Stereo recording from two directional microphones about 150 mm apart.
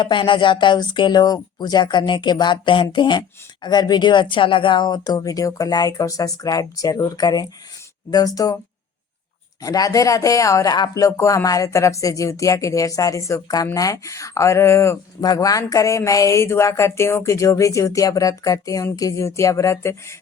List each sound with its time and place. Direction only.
0.0 s speech: 35° left (ahead or behind)
9.6 s speech: 25° left (ahead or behind)